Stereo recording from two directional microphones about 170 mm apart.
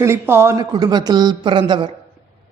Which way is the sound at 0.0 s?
15° right (ahead or behind).